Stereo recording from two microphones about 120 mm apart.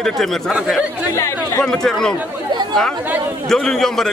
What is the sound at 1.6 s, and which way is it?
Speech, 5° left (ahead or behind).